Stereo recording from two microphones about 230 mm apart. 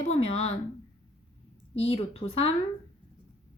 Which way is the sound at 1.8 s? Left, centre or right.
Left.